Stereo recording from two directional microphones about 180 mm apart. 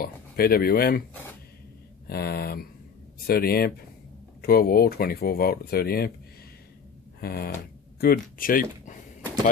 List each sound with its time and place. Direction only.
0.0 s speech: 55° left (ahead or behind)
2.0 s speech: 60° left (ahead or behind)
7.2 s speech: 60° left (ahead or behind)